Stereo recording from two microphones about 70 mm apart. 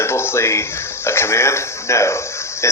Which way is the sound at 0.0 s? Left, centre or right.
Left.